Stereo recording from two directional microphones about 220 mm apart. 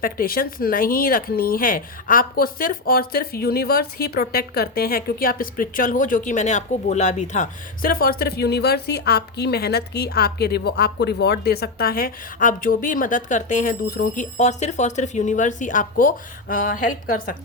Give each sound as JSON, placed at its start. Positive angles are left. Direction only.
{"t": 0.0, "sound": "speech", "side_deg": 40}